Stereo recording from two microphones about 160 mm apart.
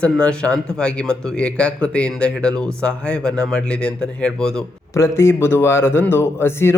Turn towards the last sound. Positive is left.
turn(degrees=15)  # may be behind; listen again after turning